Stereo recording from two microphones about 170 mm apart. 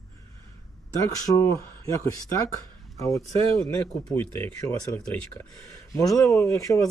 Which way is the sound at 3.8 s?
5° left (ahead or behind).